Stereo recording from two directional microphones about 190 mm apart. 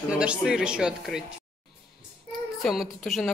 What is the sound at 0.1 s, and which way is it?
A woman's voice, 5° right (ahead or behind).